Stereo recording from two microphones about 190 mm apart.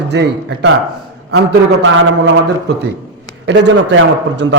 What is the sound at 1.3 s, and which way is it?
A man's voice, 75° right (ahead or behind).